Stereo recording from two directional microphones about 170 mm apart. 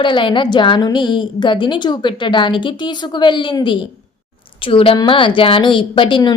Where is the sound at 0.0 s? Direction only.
30° left (ahead or behind).